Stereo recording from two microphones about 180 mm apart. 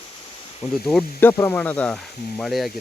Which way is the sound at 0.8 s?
10° left (ahead or behind).